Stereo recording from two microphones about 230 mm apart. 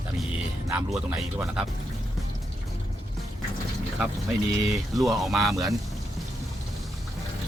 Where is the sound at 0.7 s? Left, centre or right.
Centre.